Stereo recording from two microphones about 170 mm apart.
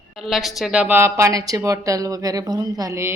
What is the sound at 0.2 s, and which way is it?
A woman's voice, centre (ahead or behind).